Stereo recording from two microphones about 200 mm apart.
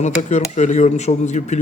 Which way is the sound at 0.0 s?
35° left (ahead or behind).